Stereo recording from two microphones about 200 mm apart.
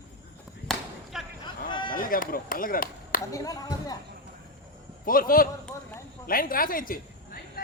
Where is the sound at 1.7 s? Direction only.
25° left (ahead or behind).